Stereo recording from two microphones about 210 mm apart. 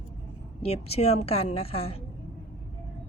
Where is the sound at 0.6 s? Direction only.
30° left (ahead or behind).